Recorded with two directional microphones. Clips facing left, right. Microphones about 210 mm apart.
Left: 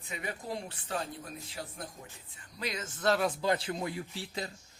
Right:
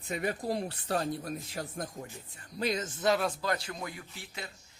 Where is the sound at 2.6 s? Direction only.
25° right (ahead or behind).